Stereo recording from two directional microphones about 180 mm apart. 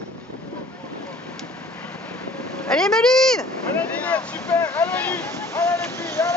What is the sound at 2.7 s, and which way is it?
Vehicle, 5° left (ahead or behind).